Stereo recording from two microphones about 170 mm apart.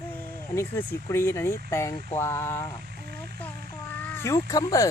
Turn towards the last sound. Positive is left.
turn(degrees=20)  # may be behind; listen again after turning